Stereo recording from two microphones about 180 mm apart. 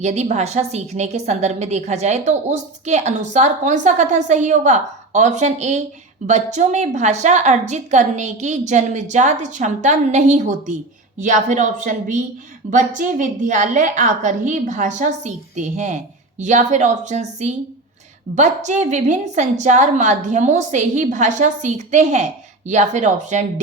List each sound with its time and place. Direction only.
0.0 s a woman's voice: 40° right (ahead or behind)